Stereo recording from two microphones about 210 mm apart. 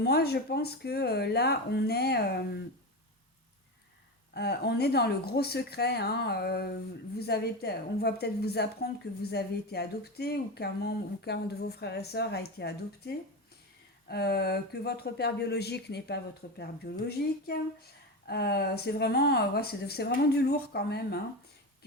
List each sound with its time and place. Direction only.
0.0 s speech: 50° left (ahead or behind)
4.4 s speech: 50° left (ahead or behind)